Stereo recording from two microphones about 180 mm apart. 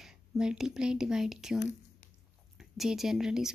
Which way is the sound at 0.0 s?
5° right (ahead or behind).